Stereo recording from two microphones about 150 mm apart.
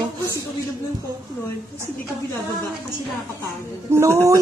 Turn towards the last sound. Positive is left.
turn(degrees=-20)  # may be behind; listen again after turning